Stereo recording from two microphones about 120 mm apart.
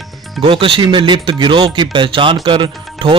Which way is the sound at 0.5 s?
45° right (ahead or behind).